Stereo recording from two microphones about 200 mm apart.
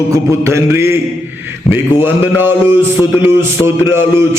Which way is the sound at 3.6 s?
15° left (ahead or behind).